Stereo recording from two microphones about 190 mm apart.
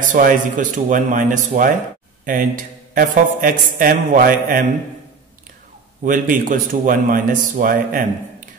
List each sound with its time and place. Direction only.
0.1 s speech: 45° right (ahead or behind)
6.0 s speech: 45° right (ahead or behind)